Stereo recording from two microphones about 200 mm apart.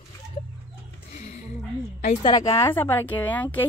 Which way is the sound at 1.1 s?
35° left (ahead or behind).